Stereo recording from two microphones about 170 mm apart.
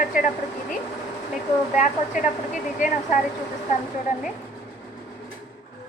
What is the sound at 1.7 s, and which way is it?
A woman's voice, 50° left (ahead or behind).